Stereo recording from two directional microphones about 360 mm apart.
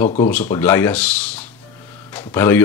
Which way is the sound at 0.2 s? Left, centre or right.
Centre.